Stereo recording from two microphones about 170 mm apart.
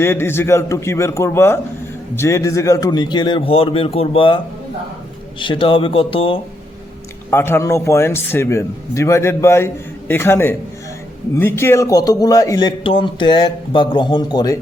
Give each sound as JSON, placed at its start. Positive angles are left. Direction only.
{"t": 0.0, "sound": "a man's voice", "side_deg": 15}
{"t": 5.4, "sound": "speech", "side_deg": 30}
{"t": 7.3, "sound": "a man's voice", "side_deg": 15}